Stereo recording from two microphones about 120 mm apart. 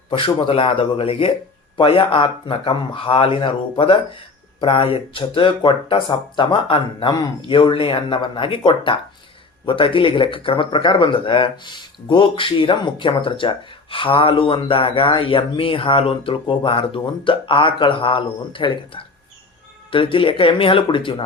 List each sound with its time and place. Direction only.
0.1 s speech: 45° left (ahead or behind)